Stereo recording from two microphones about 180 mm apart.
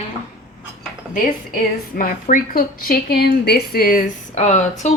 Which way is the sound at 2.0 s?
50° left (ahead or behind).